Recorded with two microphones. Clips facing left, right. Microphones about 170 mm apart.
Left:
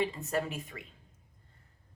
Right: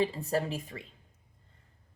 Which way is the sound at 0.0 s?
30° right (ahead or behind).